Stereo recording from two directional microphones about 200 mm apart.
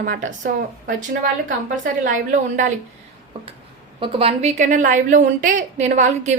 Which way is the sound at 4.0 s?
25° right (ahead or behind).